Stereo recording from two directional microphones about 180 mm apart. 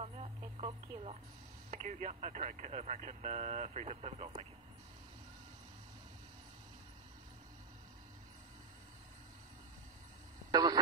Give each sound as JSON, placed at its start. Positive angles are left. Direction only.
{"t": 0.0, "sound": "radio", "side_deg": -35}
{"t": 1.7, "sound": "speech", "side_deg": -45}
{"t": 10.5, "sound": "radio", "side_deg": -20}